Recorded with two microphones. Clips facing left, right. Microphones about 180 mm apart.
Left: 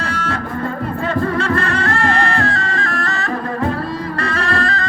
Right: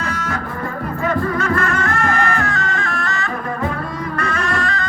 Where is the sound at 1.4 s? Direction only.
30° left (ahead or behind).